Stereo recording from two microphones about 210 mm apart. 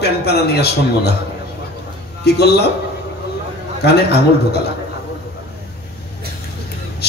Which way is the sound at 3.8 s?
50° left (ahead or behind).